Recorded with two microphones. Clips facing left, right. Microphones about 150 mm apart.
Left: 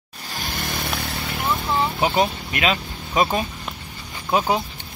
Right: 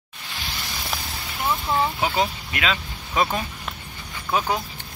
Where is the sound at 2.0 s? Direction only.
25° left (ahead or behind).